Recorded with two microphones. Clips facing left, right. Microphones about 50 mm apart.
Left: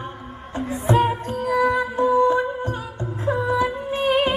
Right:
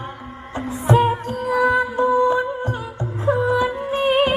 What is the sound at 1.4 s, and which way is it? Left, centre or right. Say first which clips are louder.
Music: right 2 dB; right.